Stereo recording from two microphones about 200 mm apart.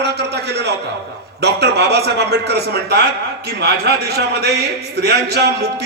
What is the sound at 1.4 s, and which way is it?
A man's voice, 55° right (ahead or behind).